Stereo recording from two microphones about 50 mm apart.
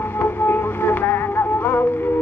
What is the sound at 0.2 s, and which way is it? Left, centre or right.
Music, left.